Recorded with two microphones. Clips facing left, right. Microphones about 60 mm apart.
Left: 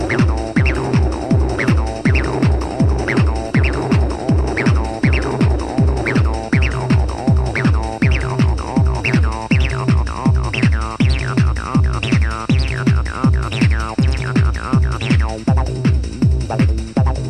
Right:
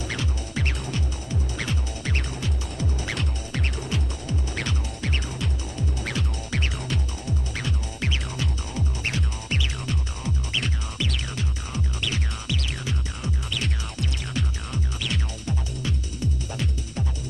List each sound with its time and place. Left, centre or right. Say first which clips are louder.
0.0 s music: left 14 dB; left